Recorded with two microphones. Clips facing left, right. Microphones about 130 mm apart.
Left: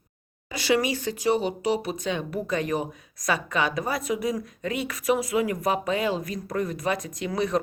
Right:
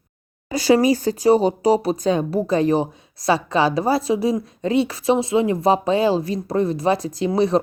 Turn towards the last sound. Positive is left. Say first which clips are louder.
# right 8 dB
turn(degrees=-30)  # may be behind; listen again after turning